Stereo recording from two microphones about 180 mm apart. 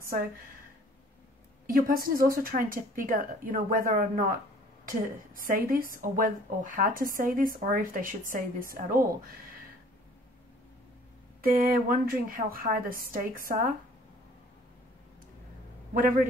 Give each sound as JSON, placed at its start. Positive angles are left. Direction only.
{"t": 1.7, "sound": "a woman's voice", "side_deg": -50}
{"t": 5.5, "sound": "a woman's voice", "side_deg": -50}
{"t": 11.5, "sound": "a woman's voice", "side_deg": -55}
{"t": 15.9, "sound": "a woman's voice", "side_deg": -50}